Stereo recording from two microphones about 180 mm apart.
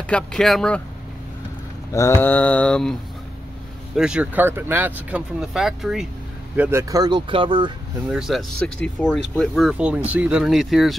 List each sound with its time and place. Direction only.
0.0 s speech: 5° left (ahead or behind)
1.9 s mantra: 15° left (ahead or behind)
3.9 s speech: 5° right (ahead or behind); by 7.7 s 30° right (ahead or behind)
8.1 s speech: centre (ahead or behind)